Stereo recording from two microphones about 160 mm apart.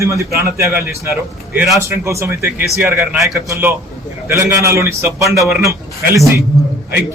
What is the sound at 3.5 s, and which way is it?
A man's voice, 15° right (ahead or behind).